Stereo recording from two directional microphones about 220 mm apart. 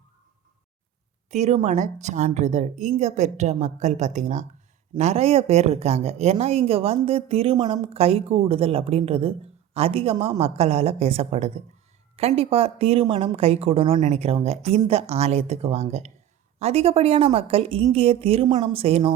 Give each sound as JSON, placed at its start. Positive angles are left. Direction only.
{"t": 1.3, "sound": "a woman's voice", "side_deg": -30}